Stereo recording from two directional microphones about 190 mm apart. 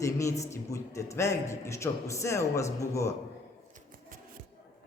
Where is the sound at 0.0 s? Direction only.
15° left (ahead or behind).